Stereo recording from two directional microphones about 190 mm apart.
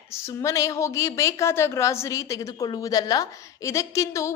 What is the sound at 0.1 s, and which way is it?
A woman's voice, 15° left (ahead or behind).